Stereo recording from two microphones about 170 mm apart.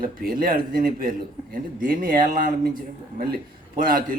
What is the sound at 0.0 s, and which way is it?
Speech, 60° right (ahead or behind).